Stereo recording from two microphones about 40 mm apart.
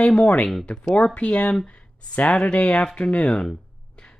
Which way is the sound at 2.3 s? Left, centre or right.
Left.